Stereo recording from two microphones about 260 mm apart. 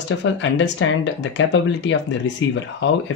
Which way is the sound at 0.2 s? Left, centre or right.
Left.